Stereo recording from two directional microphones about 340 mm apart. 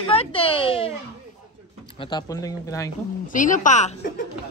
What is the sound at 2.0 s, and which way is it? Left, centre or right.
Speech, centre.